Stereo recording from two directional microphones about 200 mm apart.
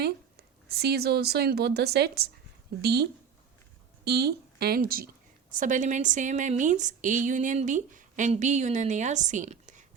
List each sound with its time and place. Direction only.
0.0 s a woman's voice: 55° right (ahead or behind)